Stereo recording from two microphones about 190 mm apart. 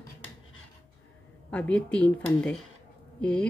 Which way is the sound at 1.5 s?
5° left (ahead or behind).